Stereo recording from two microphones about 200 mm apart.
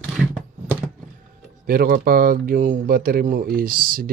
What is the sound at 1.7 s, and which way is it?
Speech, 45° right (ahead or behind).